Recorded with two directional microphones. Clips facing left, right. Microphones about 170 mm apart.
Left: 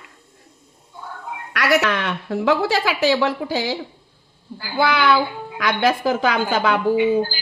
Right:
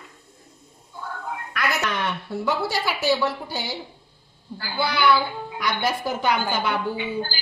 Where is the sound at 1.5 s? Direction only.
85° left.